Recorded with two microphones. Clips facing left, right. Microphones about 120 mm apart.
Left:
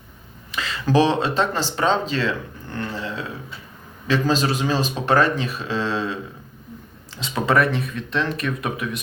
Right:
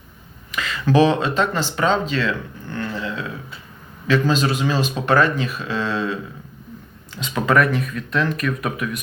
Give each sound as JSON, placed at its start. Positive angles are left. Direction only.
{"t": 0.5, "sound": "speech", "side_deg": 35}
{"t": 2.7, "sound": "a sound", "side_deg": 35}
{"t": 4.0, "sound": "speech", "side_deg": 35}
{"t": 7.2, "sound": "speech", "side_deg": 30}